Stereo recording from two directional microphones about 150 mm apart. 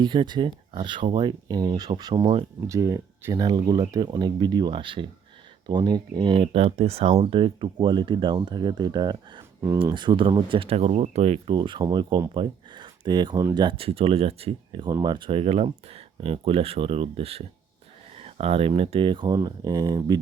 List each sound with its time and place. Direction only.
0.0 s speech: 30° right (ahead or behind)
11.5 s speech: 30° right (ahead or behind)